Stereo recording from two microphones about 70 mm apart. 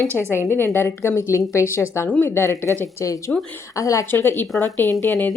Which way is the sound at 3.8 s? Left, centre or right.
Left.